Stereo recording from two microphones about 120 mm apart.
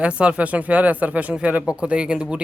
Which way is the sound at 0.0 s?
10° right (ahead or behind).